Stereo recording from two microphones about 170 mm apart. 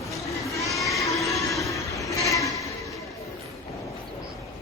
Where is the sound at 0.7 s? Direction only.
Centre (ahead or behind).